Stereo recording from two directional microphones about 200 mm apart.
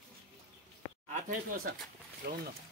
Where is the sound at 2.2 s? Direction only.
50° right (ahead or behind).